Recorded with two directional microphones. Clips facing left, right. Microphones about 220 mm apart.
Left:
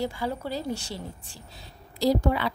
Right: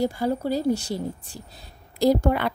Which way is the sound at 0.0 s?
40° right (ahead or behind).